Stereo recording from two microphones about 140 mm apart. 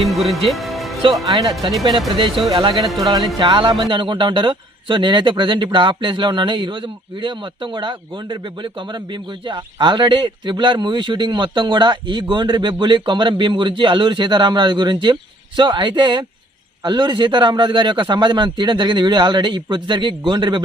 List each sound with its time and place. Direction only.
0.1 s speech: centre (ahead or behind)
2.1 s speech: 40° right (ahead or behind)
2.8 s speech: centre (ahead or behind)
3.3 s speech: 40° right (ahead or behind)